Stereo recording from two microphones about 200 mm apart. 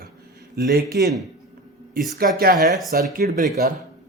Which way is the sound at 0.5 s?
55° right (ahead or behind).